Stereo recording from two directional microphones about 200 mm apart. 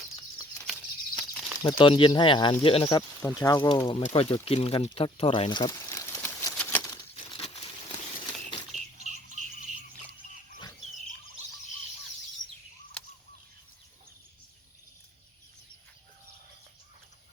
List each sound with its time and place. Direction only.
0.6 s a sound: 5° left (ahead or behind)
1.6 s speech: 25° left (ahead or behind)
3.8 s pour: 30° left (ahead or behind)
8.4 s bird flight: 35° left (ahead or behind)